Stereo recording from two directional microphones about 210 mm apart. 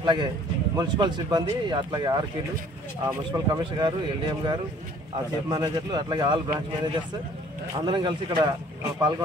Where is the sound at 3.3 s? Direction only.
20° right (ahead or behind).